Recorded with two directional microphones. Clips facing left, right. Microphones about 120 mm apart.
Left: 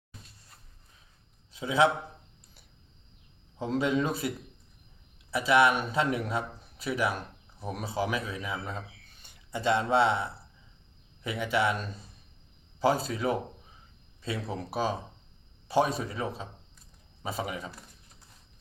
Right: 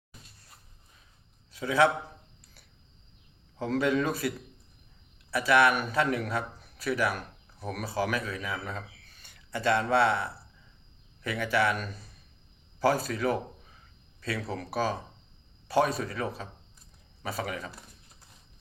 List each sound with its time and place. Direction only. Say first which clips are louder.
1.5 s a man's voice: even; 20° left (ahead or behind)
3.6 s a man's voice: right 1 dB; 20° left (ahead or behind)
5.3 s a man's voice: even; 20° left (ahead or behind)